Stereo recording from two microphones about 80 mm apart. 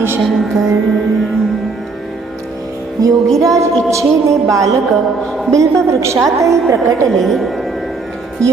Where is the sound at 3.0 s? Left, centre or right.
Right.